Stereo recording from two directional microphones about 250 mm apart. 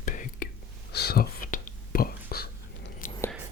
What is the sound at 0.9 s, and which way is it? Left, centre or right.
Whispering, left.